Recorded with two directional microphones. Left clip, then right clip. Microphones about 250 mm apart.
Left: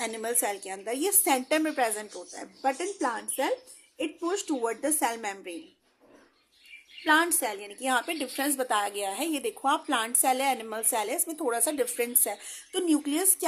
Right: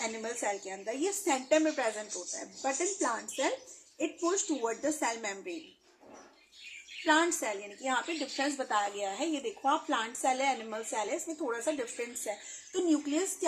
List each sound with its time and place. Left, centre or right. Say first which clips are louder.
0.0 s a woman's voice: left 4 dB; left
7.0 s a woman's voice: left 4 dB; left